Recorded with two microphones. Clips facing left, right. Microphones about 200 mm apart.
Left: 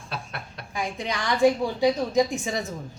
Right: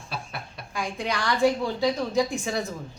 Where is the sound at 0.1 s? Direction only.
5° right (ahead or behind).